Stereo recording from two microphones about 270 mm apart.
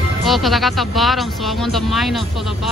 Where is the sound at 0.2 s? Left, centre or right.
Centre.